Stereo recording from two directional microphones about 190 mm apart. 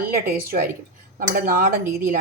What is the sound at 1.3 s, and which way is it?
Speech, 45° right (ahead or behind).